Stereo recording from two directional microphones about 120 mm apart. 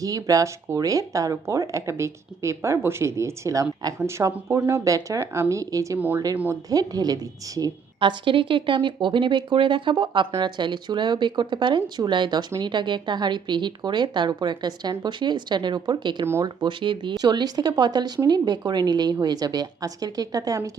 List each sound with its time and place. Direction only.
0.0 s speech: 30° right (ahead or behind)
6.0 s speech: 15° right (ahead or behind)
6.7 s speech: 30° right (ahead or behind)
7.9 s speech: 45° right (ahead or behind)
16.2 s speech: 20° right (ahead or behind)
16.6 s speech: 45° right (ahead or behind)